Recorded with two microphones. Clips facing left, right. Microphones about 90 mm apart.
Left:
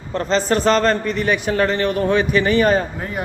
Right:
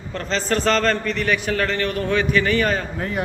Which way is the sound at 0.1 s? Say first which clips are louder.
Left 5 dB; 25° left (ahead or behind).